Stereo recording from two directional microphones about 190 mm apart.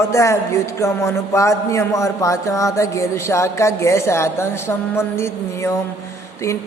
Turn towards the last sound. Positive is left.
turn(degrees=15)  # may be behind; listen again after turning